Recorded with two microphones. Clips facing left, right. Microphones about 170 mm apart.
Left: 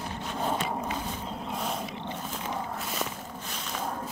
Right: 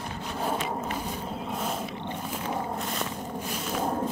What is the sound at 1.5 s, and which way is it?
Wild animals, centre (ahead or behind).